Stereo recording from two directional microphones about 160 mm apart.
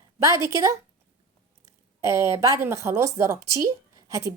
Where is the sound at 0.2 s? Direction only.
20° right (ahead or behind).